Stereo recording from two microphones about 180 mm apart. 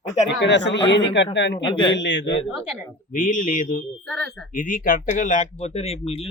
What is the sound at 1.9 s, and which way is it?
Speech, 75° left (ahead or behind).